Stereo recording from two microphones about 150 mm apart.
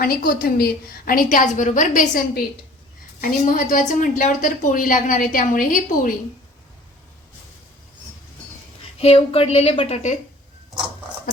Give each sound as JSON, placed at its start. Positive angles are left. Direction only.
{"t": 0.0, "sound": "a woman's voice", "side_deg": 80}
{"t": 9.0, "sound": "a woman's voice", "side_deg": 40}